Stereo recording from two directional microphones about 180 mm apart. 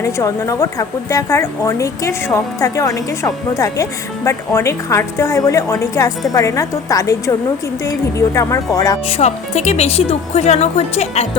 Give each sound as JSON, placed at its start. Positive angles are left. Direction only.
{"t": 0.0, "sound": "a woman's voice", "side_deg": 15}
{"t": 9.0, "sound": "speech", "side_deg": 35}